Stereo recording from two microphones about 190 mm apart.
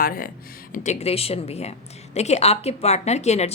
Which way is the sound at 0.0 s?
50° left (ahead or behind).